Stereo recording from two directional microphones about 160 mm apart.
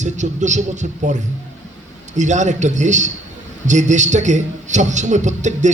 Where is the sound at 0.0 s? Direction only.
50° right (ahead or behind).